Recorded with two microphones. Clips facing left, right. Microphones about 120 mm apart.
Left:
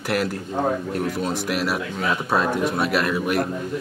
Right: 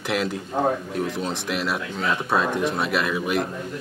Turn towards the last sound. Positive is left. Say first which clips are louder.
# left 2 dB
turn(degrees=0)  # may be behind; listen again after turning